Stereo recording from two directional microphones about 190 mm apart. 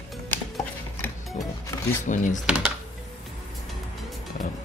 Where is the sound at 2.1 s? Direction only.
40° left (ahead or behind).